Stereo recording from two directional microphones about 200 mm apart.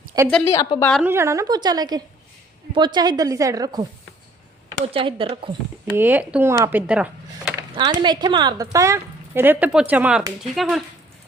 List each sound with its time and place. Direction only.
0.3 s speech: 5° left (ahead or behind)
0.5 s a woman's voice: 15° left (ahead or behind)
1.0 s a woman's voice: 15° right (ahead or behind)
4.9 s a woman's voice: 25° right (ahead or behind)
6.0 s a woman's voice: 10° right (ahead or behind)
7.7 s a woman's voice: 25° right (ahead or behind); by 10.8 s centre (ahead or behind)